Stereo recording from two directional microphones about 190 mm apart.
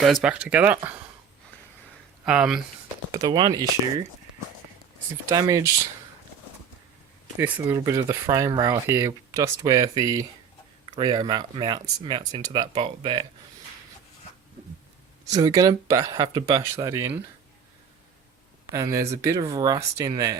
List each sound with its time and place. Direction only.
0.0 s speech: centre (ahead or behind)
2.2 s speech: 5° right (ahead or behind)
3.1 s speech: 20° right (ahead or behind)
5.3 s speech: 15° right (ahead or behind)
7.3 s speech: 10° right (ahead or behind); by 13.2 s 25° right (ahead or behind)
15.3 s speech: 20° right (ahead or behind)
18.7 s speech: 15° right (ahead or behind)